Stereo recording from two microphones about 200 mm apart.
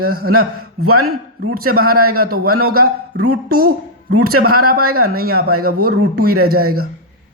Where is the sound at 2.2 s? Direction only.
50° right (ahead or behind).